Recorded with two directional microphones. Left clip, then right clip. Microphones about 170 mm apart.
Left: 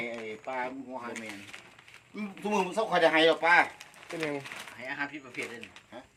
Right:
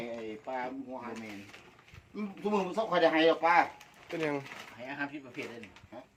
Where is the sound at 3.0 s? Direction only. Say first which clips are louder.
Left 2 dB; 20° left (ahead or behind).